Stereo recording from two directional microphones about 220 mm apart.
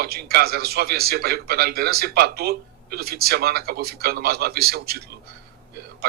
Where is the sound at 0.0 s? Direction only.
45° right (ahead or behind).